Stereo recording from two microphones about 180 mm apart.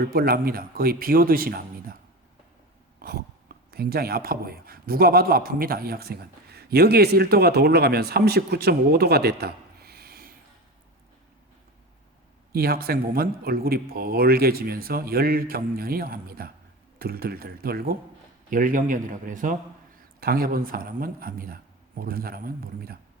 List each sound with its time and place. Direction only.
0.0 s speech: 55° right (ahead or behind)
3.0 s speech: 55° right (ahead or behind)
12.5 s a man's voice: 55° right (ahead or behind)